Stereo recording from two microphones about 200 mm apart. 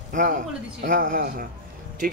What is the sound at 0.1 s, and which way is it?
A man's voice, 40° right (ahead or behind).